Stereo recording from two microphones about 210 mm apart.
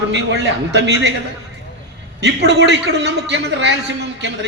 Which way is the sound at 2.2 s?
55° right (ahead or behind).